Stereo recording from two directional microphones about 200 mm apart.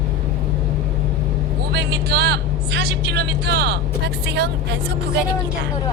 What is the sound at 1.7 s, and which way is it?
Speech, 55° right (ahead or behind).